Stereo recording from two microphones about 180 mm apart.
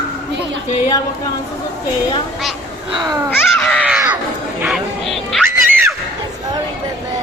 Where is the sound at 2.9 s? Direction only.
25° right (ahead or behind).